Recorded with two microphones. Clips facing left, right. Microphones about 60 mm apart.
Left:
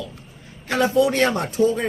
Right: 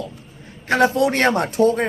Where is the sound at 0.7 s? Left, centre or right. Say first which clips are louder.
Right 2 dB; right.